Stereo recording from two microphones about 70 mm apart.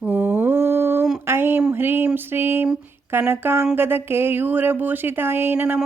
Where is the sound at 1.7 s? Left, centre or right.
Right.